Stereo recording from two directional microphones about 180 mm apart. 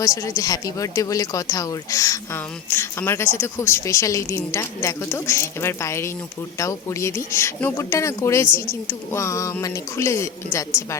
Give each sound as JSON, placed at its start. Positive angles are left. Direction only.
{"t": 0.0, "sound": "speech", "side_deg": 20}